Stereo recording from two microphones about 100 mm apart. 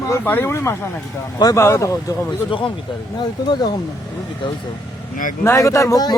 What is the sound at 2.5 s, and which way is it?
Speech, 55° left (ahead or behind).